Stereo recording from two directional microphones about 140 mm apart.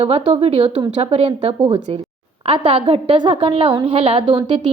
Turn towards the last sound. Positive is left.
turn(degrees=-40)  # may be behind; listen again after turning